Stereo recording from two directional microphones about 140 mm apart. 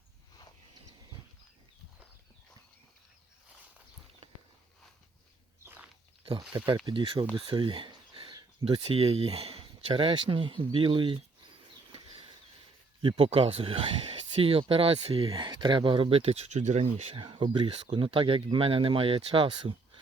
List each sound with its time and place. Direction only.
6.8 s speech: 35° right (ahead or behind)
11.9 s a sound: 40° right (ahead or behind)
13.0 s speech: 40° right (ahead or behind)